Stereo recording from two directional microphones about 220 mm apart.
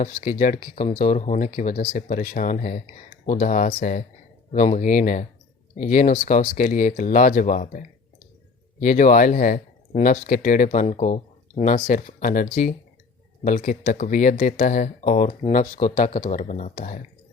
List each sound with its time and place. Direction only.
0.0 s speech: 30° left (ahead or behind)